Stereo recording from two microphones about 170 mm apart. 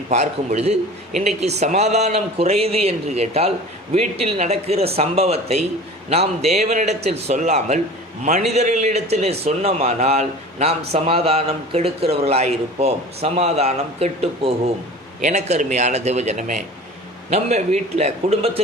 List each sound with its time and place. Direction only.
0.1 s a man's voice: 40° right (ahead or behind)